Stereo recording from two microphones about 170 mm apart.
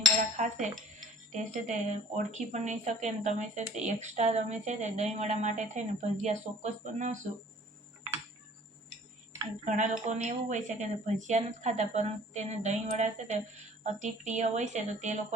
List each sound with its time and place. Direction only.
0.3 s speech: 45° right (ahead or behind)
9.6 s speech: 45° right (ahead or behind)